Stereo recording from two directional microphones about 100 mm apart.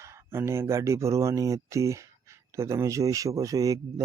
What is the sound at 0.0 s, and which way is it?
Speech, 25° right (ahead or behind).